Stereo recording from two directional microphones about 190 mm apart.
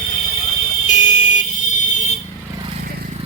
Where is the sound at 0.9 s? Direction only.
40° left (ahead or behind).